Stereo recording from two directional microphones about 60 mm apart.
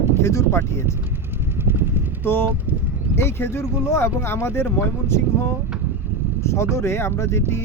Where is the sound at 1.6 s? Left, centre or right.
Right.